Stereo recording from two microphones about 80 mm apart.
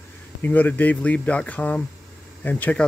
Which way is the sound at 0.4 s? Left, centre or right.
Left.